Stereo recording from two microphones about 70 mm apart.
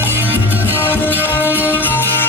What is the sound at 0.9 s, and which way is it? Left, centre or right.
Music, left.